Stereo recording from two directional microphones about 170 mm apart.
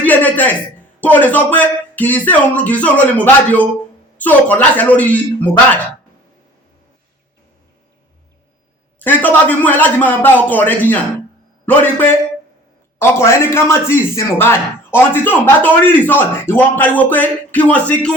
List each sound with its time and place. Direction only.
0.0 s a sound: 10° left (ahead or behind)
1.0 s a man's voice: 10° left (ahead or behind)
9.0 s a man's voice: 10° left (ahead or behind)